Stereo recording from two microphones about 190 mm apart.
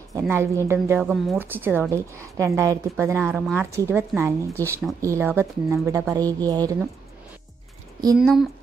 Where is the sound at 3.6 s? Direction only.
15° right (ahead or behind).